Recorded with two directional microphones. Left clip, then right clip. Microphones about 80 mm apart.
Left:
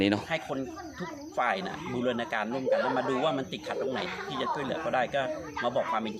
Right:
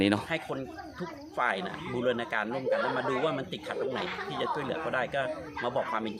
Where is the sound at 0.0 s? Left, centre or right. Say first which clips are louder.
Even; right.